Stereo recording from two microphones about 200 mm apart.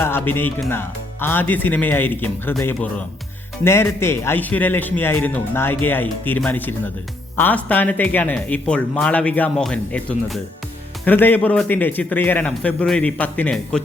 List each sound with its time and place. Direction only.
0.0 s a man's voice: 10° left (ahead or behind)